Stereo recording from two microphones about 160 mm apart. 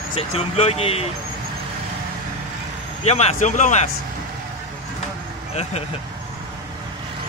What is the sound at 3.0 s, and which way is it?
Speech, 40° left (ahead or behind).